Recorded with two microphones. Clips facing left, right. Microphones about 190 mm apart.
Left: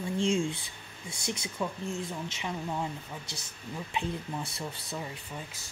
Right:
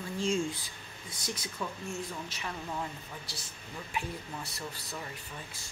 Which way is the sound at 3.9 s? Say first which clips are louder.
Left 4 dB; 25° left (ahead or behind).